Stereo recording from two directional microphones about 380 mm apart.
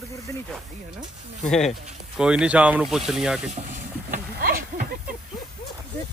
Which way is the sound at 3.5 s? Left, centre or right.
Centre.